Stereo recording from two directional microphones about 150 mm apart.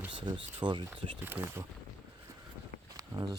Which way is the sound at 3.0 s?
25° right (ahead or behind).